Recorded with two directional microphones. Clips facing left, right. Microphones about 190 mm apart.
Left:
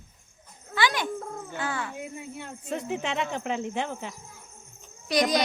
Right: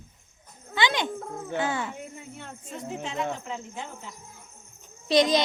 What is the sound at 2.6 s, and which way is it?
Speech, 70° left (ahead or behind).